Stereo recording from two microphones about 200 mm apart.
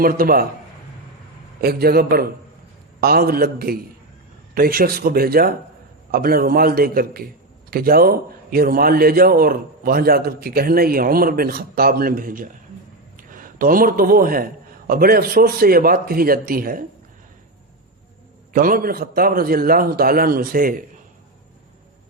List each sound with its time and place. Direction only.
0.0 s a man's voice: 45° right (ahead or behind)
1.6 s a man's voice: 50° right (ahead or behind)
18.5 s a man's voice: 45° right (ahead or behind)